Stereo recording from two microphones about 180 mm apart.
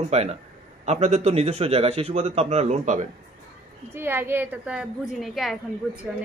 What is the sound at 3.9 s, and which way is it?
A woman's voice, 10° right (ahead or behind).